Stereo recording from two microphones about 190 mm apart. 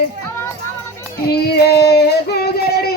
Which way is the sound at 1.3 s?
55° left (ahead or behind).